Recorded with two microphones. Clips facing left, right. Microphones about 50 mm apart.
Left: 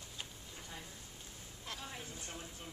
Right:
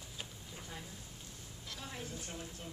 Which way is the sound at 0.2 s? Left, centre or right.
Centre.